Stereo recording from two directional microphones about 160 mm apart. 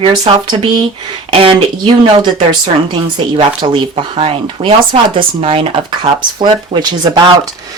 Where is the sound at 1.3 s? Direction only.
35° right (ahead or behind).